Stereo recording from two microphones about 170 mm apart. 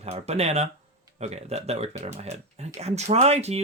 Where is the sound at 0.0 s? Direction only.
40° right (ahead or behind).